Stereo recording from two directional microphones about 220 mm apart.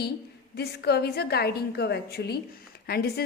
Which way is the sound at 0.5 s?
45° left (ahead or behind).